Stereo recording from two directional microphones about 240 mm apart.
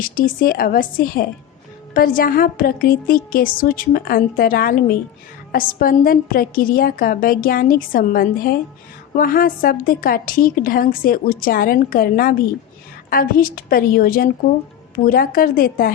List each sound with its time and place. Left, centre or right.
0.0 s a woman's voice: left